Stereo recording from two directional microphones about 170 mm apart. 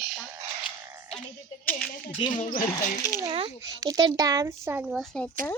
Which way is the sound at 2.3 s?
50° left (ahead or behind).